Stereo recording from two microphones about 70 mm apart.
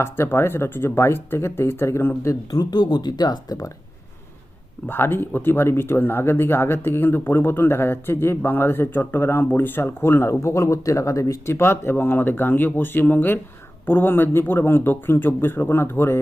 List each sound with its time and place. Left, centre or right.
0.0 s speech: left
2.5 s speech: left
4.9 s speech: left